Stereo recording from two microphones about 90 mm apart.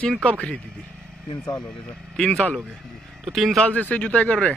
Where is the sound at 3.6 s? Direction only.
15° left (ahead or behind).